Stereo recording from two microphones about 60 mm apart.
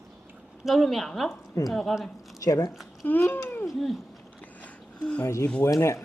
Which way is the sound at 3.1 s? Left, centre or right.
Left.